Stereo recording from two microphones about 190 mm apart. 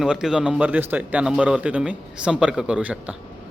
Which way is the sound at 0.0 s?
5° right (ahead or behind).